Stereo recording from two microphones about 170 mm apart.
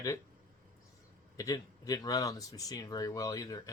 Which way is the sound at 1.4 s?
20° left (ahead or behind).